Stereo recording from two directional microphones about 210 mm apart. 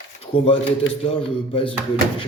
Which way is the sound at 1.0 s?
25° left (ahead or behind).